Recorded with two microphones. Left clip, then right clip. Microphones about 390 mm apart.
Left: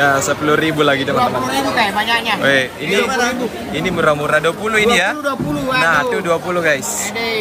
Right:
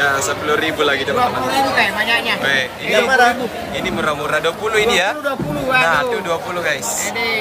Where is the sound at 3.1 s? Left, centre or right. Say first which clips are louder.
Right 5 dB; centre.